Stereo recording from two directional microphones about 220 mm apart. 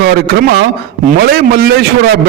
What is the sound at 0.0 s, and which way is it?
A man's voice, 45° right (ahead or behind).